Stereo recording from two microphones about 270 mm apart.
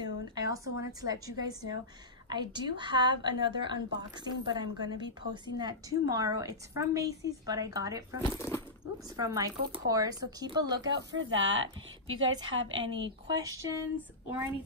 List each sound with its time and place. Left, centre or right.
0.0 s a woman's voice: centre
8.3 s speech: centre
9.1 s a woman's voice: centre
11.1 s a woman's voice: right
12.8 s a woman's voice: centre